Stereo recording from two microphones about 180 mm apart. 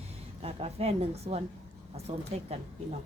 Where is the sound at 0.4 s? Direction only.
35° right (ahead or behind).